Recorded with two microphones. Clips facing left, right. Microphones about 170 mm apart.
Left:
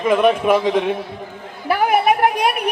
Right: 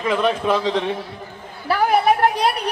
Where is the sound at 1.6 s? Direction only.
20° left (ahead or behind).